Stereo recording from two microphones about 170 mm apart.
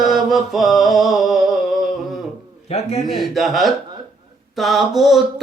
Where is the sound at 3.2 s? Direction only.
Centre (ahead or behind).